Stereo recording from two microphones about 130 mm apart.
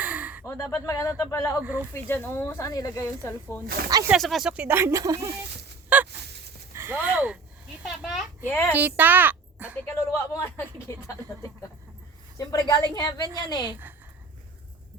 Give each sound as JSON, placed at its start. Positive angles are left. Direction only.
{"t": 0.0, "sound": "a sound", "side_deg": -10}
{"t": 0.4, "sound": "speech", "side_deg": 20}
{"t": 3.8, "sound": "speech", "side_deg": -30}
{"t": 4.1, "sound": "speech", "side_deg": 0}
{"t": 5.9, "sound": "fowl", "side_deg": -10}
{"t": 6.7, "sound": "a sound", "side_deg": -15}
{"t": 8.4, "sound": "a woman's voice", "side_deg": 15}
{"t": 8.7, "sound": "a child's voice", "side_deg": -15}
{"t": 9.9, "sound": "speech", "side_deg": 20}